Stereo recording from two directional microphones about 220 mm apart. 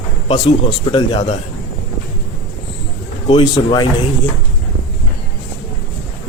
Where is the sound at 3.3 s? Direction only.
20° left (ahead or behind).